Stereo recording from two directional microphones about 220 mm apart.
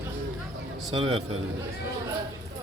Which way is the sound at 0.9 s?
25° right (ahead or behind).